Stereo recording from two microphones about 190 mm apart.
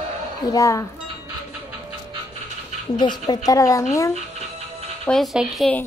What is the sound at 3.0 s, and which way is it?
Speech, 25° left (ahead or behind).